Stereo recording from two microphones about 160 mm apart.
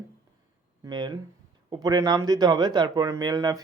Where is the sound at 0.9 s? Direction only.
25° right (ahead or behind).